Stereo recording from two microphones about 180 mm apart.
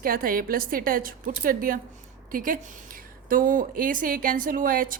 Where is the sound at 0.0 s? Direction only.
55° right (ahead or behind).